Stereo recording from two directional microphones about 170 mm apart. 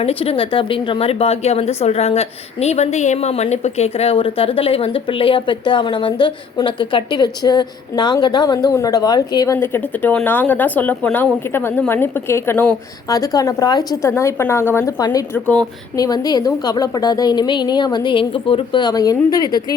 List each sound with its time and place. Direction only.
0.0 s a woman's voice: 35° left (ahead or behind)